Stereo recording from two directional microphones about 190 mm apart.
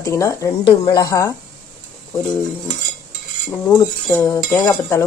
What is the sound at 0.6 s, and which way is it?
Speech, 25° left (ahead or behind).